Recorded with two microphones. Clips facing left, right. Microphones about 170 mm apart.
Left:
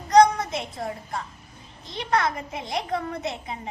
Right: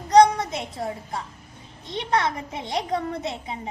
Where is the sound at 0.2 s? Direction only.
25° right (ahead or behind).